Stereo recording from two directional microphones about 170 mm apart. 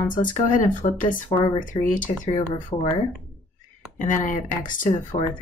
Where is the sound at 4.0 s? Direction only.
50° left (ahead or behind).